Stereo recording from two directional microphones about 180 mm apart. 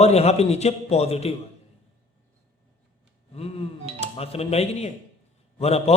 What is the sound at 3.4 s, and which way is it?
A man's voice, 35° left (ahead or behind).